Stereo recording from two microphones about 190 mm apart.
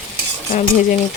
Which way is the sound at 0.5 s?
45° left (ahead or behind).